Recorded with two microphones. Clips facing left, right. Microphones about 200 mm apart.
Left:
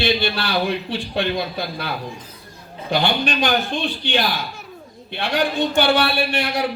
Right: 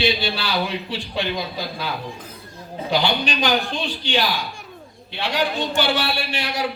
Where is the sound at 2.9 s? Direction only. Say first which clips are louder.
Left 1 dB; 55° left (ahead or behind).